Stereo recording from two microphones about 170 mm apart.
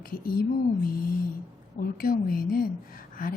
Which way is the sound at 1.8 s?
60° left (ahead or behind).